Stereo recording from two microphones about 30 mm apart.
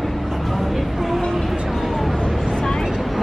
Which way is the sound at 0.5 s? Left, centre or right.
Centre.